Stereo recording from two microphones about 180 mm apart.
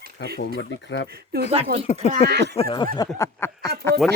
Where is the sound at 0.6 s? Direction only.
85° left.